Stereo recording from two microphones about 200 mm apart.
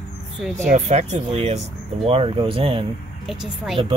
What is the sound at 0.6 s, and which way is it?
Speech, 40° right (ahead or behind).